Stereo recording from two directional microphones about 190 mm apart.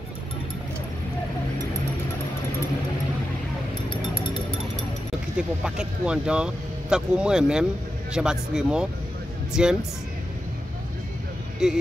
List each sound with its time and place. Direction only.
3.9 s music: 25° left (ahead or behind)
5.6 s speech: 5° right (ahead or behind)
11.6 s speech: 5° right (ahead or behind)